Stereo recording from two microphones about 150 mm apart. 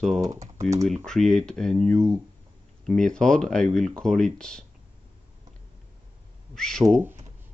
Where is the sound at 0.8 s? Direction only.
5° left (ahead or behind).